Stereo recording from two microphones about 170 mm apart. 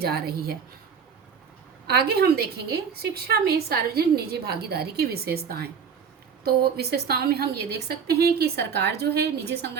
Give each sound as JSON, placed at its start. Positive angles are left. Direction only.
{"t": 0.0, "sound": "a woman's voice", "side_deg": -65}
{"t": 1.9, "sound": "a woman's voice", "side_deg": -70}